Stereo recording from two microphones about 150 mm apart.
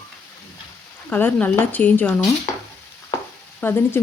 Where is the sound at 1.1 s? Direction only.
10° left (ahead or behind).